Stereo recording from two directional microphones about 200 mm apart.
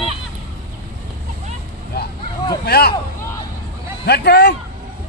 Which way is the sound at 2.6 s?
50° left (ahead or behind).